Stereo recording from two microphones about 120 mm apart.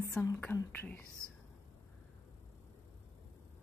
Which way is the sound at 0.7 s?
15° left (ahead or behind).